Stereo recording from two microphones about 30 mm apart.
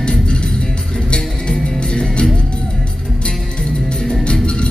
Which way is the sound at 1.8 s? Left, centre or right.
Left.